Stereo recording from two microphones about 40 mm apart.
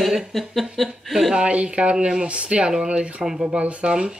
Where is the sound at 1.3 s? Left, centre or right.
Right.